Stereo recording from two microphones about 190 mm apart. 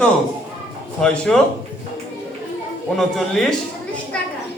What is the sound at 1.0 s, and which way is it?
Speech, centre (ahead or behind).